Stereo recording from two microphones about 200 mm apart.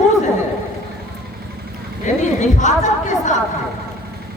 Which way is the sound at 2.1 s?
35° left (ahead or behind).